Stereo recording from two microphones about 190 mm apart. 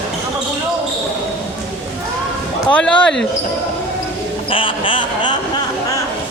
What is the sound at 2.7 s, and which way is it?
Speech, 5° left (ahead or behind).